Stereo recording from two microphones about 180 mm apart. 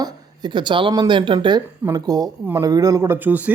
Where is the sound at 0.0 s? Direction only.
25° right (ahead or behind).